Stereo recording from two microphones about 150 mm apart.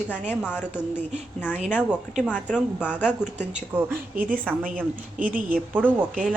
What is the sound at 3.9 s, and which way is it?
Speech, 70° right (ahead or behind).